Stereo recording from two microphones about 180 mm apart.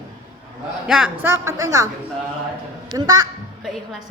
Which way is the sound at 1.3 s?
15° right (ahead or behind).